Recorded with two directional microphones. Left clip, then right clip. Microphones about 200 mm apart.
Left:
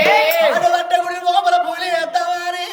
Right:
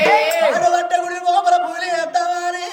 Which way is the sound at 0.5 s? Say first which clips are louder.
Left 1 dB; centre (ahead or behind).